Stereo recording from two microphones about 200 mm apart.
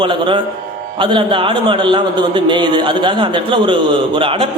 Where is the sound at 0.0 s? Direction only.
25° right (ahead or behind).